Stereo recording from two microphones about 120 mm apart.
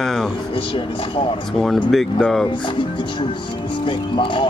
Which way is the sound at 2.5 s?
40° left (ahead or behind).